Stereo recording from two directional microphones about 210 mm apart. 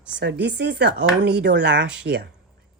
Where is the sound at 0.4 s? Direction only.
55° right (ahead or behind).